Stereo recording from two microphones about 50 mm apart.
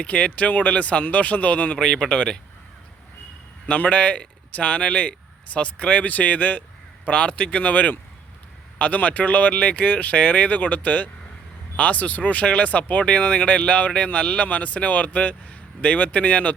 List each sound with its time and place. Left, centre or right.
0.0 s speech: left
1.8 s speech: centre
3.7 s speech: left